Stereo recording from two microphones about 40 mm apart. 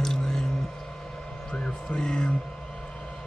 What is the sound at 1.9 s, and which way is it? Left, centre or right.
Speech, left.